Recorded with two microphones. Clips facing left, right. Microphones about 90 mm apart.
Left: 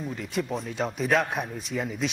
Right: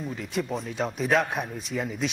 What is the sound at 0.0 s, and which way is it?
A man's voice, centre (ahead or behind).